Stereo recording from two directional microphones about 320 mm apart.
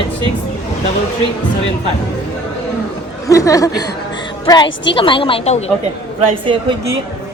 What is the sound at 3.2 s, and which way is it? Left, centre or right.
A woman's voice, centre.